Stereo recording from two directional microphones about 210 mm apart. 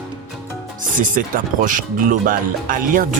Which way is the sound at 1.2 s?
40° right (ahead or behind).